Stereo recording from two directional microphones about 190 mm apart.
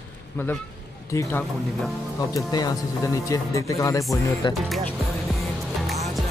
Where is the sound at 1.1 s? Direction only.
15° left (ahead or behind).